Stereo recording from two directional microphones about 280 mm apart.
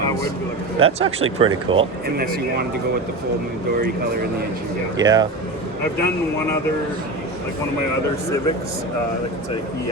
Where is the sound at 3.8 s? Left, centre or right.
Right.